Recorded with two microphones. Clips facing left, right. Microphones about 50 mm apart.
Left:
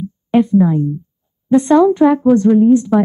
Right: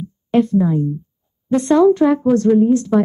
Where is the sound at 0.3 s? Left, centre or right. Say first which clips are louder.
Left 3 dB; centre.